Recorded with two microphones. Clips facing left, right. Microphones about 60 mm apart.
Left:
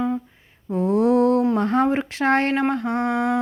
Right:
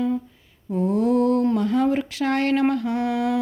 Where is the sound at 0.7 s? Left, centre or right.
Left.